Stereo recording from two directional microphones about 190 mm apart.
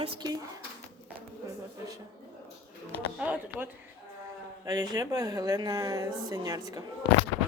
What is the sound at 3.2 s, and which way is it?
Speech, 5° right (ahead or behind).